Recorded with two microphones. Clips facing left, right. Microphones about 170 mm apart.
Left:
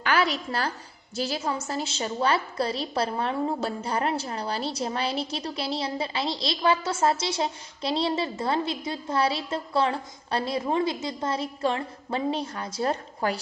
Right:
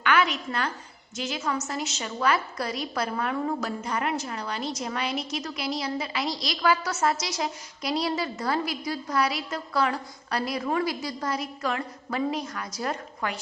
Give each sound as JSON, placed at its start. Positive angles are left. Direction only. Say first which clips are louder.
{"t": 0.0, "sound": "a woman's voice", "louder": "even", "side_deg": 35}